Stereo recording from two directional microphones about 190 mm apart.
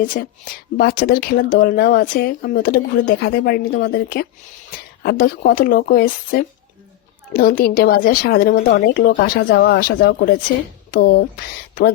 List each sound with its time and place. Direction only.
0.0 s a woman's voice: 45° left (ahead or behind)